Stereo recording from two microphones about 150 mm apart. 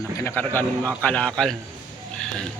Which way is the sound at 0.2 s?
15° left (ahead or behind).